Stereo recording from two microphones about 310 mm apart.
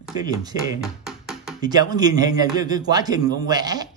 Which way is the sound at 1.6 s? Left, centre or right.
Centre.